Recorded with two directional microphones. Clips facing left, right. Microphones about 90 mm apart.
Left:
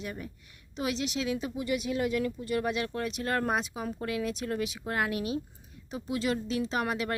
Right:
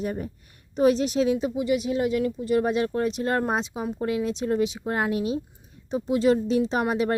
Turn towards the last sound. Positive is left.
turn(degrees=-30)  # may be behind; listen again after turning